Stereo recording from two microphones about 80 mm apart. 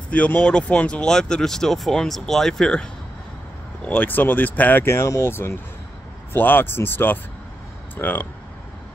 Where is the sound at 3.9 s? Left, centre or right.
Left.